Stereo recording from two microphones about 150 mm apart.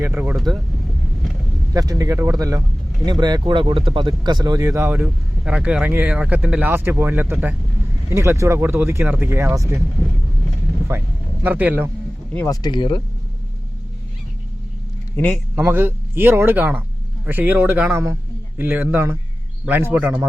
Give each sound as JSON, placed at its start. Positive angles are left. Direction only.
{"t": 0.0, "sound": "speech", "side_deg": -10}
{"t": 0.3, "sound": "speech", "side_deg": 0}
{"t": 1.7, "sound": "speech", "side_deg": -25}
{"t": 10.9, "sound": "speech", "side_deg": -15}
{"t": 12.5, "sound": "speech", "side_deg": 30}
{"t": 15.1, "sound": "speech", "side_deg": 10}
{"t": 15.5, "sound": "speech", "side_deg": -15}